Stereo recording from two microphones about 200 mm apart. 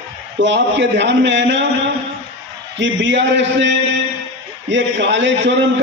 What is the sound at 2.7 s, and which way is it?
A man's voice, 65° right (ahead or behind).